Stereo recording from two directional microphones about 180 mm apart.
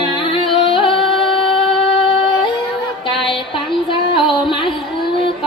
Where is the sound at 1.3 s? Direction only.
30° left (ahead or behind).